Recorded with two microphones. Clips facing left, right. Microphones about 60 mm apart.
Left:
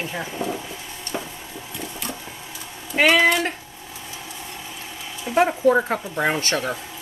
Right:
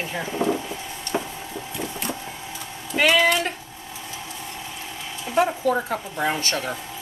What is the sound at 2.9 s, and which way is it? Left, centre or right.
Speech, left.